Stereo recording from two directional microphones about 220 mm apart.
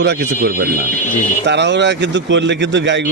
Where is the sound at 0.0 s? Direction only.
45° right (ahead or behind).